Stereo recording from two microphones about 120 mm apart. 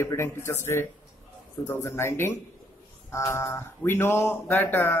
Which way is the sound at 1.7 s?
20° left (ahead or behind).